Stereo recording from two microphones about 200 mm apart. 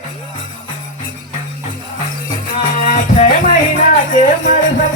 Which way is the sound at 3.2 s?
40° left (ahead or behind).